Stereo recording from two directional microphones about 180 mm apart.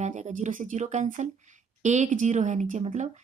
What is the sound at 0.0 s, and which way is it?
A woman's voice, 40° right (ahead or behind).